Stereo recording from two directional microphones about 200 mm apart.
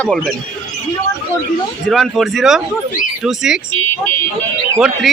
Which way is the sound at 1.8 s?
Centre (ahead or behind).